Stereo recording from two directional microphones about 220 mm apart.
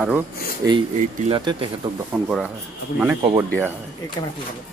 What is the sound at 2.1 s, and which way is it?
Speech, 5° right (ahead or behind).